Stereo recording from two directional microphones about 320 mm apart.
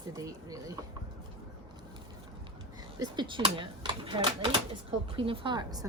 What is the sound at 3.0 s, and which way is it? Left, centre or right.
Speech, centre.